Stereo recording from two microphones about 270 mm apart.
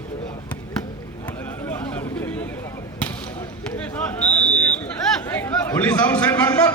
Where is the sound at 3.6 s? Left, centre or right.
Centre.